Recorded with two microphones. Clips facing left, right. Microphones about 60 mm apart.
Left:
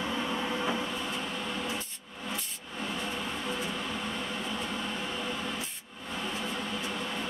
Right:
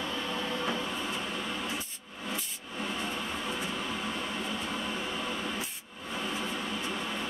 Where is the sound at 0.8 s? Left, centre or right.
Centre.